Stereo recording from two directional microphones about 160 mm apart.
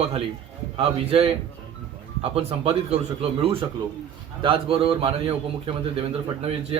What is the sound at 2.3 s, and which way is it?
A man's voice, 40° right (ahead or behind).